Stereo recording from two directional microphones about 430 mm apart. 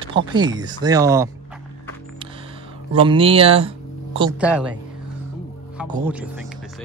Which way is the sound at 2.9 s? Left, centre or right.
Centre.